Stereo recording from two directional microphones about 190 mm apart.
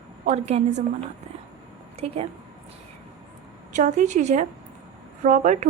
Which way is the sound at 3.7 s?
40° right (ahead or behind).